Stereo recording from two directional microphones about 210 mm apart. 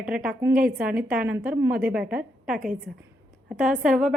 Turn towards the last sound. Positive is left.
turn(degrees=0)  # may be behind; listen again after turning